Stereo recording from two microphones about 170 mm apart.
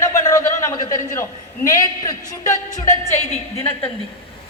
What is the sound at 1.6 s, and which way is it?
A woman's voice, 20° left (ahead or behind).